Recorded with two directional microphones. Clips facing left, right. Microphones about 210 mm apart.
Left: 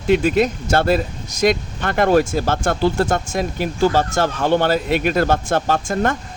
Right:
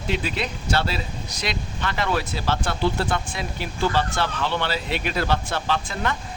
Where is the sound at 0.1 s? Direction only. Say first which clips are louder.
Left 11 dB; 50° left (ahead or behind).